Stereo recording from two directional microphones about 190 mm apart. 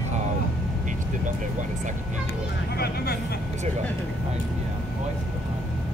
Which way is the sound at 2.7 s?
55° left (ahead or behind).